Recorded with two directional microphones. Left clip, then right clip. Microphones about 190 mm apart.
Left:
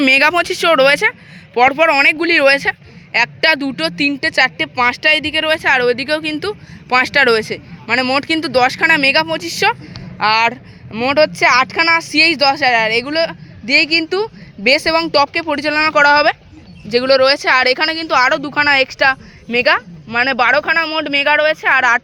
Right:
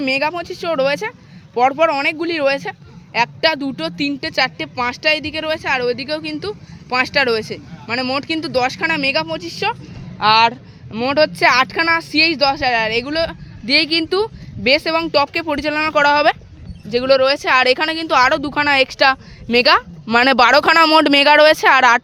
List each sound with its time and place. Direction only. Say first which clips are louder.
0.0 s speech: left 8 dB; 15° left (ahead or behind); by 16.4 s 10° right (ahead or behind)
16.9 s speech: left 2 dB; centre (ahead or behind); by 19.8 s 25° right (ahead or behind)
20.1 s speech: right 2 dB; 35° right (ahead or behind)